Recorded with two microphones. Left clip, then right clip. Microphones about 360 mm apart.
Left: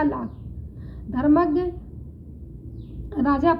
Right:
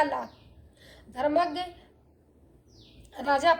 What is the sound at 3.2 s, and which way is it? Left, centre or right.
Speech, centre.